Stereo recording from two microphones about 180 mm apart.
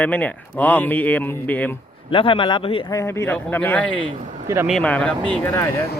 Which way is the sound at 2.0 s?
30° left (ahead or behind).